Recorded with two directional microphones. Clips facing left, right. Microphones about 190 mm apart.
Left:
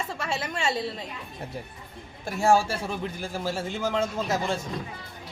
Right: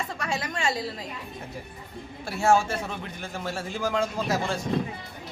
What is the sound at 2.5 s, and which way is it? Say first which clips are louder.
Speech: even; 35° left (ahead or behind).